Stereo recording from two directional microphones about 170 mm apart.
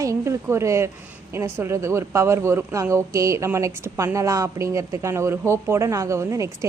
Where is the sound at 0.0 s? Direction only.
15° right (ahead or behind).